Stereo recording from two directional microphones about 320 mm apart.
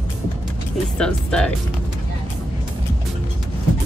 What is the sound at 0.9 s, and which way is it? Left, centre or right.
Speech, centre.